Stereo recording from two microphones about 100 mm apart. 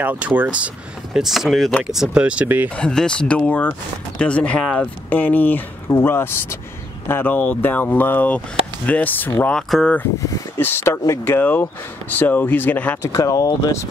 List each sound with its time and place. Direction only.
0.0 s speech: 15° right (ahead or behind)
1.1 s speech: 5° right (ahead or behind)
2.7 s speech: 10° left (ahead or behind)
9.6 s speech: 5° left (ahead or behind)
10.6 s speech: 25° left (ahead or behind)
13.0 s speech: 35° left (ahead or behind)